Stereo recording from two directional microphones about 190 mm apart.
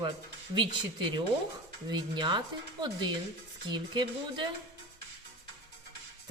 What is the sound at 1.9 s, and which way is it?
Speech, 25° right (ahead or behind).